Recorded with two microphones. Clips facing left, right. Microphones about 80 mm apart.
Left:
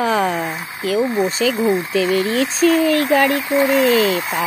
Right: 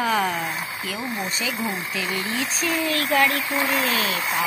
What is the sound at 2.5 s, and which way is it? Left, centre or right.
Speech, left.